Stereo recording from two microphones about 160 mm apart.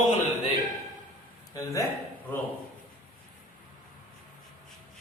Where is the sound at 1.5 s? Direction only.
20° left (ahead or behind).